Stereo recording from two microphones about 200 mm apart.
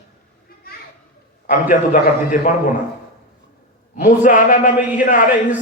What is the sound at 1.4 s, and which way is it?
A man's voice, 40° left (ahead or behind).